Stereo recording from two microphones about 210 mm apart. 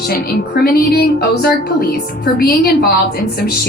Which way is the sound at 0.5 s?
45° left (ahead or behind).